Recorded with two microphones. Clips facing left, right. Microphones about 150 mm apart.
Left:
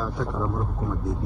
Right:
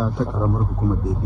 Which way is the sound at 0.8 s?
25° right (ahead or behind).